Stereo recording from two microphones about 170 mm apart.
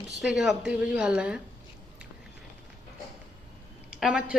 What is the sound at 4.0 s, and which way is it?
Speech, 5° right (ahead or behind).